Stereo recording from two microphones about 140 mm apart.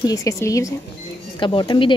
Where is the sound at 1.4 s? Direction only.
35° left (ahead or behind).